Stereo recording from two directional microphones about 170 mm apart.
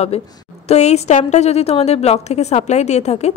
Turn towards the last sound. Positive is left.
turn(degrees=40)  # may be behind; listen again after turning